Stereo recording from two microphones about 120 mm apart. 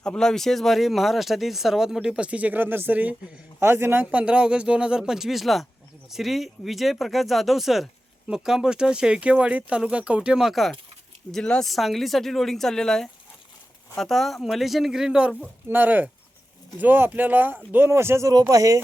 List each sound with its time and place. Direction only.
0.0 s speech: 5° left (ahead or behind)
15.7 s speech: 15° right (ahead or behind)